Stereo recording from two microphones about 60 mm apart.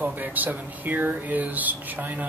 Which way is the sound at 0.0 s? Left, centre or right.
Right.